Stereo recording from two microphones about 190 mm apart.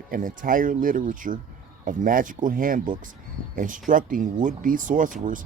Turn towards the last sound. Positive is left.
turn(degrees=-45)  # may be behind; listen again after turning